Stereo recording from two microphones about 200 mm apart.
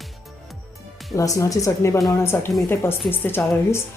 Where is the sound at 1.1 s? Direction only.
15° left (ahead or behind).